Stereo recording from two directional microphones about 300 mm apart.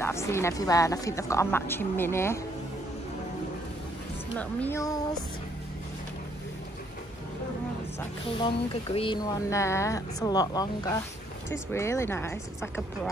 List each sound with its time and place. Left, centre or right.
0.0 s speech: centre
4.4 s speech: centre
8.0 s speech: centre